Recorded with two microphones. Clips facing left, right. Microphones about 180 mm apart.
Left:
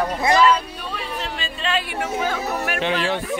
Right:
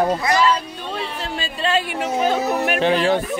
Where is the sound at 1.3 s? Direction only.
30° right (ahead or behind).